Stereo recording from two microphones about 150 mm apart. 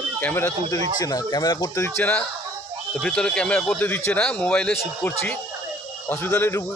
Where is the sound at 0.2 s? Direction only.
15° left (ahead or behind).